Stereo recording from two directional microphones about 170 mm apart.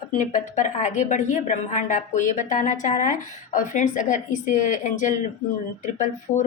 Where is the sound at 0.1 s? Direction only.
45° left (ahead or behind).